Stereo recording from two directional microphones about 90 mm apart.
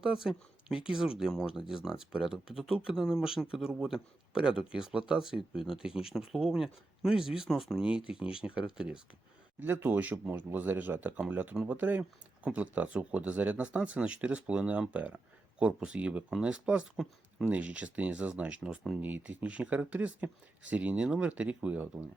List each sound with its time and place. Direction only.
0.0 s speech: 5° right (ahead or behind)
9.6 s speech: 20° right (ahead or behind)